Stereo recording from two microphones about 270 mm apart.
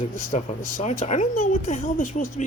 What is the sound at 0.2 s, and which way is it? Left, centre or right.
Speech, left.